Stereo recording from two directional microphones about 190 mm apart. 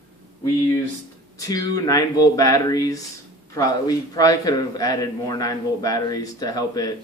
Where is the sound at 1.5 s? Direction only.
20° left (ahead or behind).